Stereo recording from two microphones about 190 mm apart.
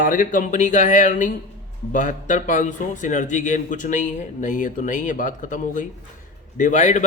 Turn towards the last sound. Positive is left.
turn(degrees=40)  # may be behind; listen again after turning